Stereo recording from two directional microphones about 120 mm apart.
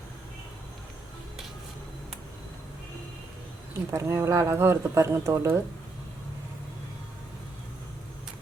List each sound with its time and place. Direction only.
3.9 s speech: 20° right (ahead or behind)